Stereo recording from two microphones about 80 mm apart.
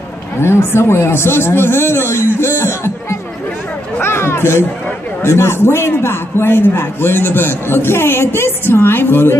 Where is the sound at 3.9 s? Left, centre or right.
Left.